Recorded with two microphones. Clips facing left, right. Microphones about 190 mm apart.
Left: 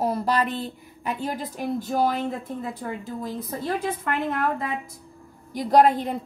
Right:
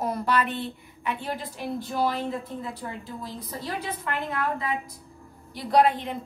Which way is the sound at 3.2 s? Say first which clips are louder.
Left 6 dB; 50° left (ahead or behind).